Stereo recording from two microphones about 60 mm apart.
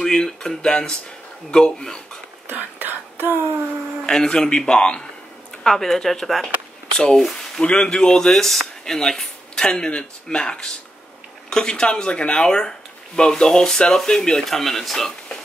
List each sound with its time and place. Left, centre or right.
0.0 s speech: centre
2.4 s whispering: right
4.0 s speech: centre